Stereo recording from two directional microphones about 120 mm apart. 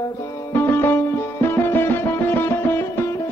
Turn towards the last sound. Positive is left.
turn(degrees=20)  # may be behind; listen again after turning